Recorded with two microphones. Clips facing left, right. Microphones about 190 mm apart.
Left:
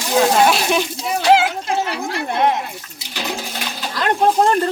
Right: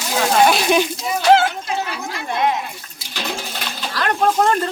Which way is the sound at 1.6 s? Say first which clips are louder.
Left 3 dB; 65° left (ahead or behind).